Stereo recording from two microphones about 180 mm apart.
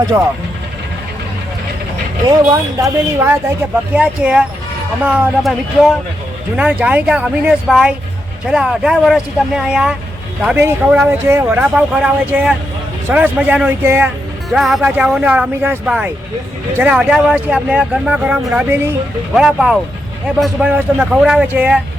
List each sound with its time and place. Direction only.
2.2 s speech: 20° right (ahead or behind)
14.5 s speech: centre (ahead or behind)